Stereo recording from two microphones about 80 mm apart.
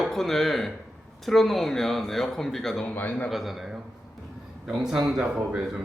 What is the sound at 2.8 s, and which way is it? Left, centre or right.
Speech, centre.